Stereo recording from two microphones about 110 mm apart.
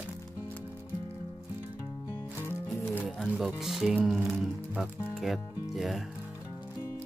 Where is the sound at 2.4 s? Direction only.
20° left (ahead or behind).